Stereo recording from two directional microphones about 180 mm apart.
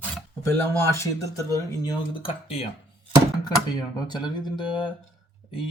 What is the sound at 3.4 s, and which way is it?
Speech, 25° left (ahead or behind).